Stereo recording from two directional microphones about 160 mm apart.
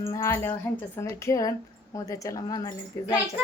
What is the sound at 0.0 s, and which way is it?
A woman's voice, 20° left (ahead or behind).